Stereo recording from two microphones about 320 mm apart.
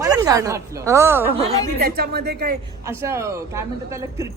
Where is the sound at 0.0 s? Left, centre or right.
Centre.